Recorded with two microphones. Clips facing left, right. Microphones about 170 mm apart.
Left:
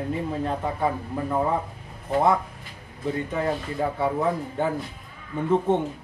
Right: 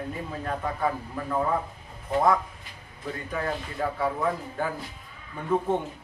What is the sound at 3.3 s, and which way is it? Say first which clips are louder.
Speech: left 4 dB; 20° left (ahead or behind).